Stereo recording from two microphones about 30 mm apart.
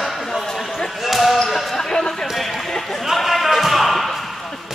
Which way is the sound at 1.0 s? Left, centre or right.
Centre.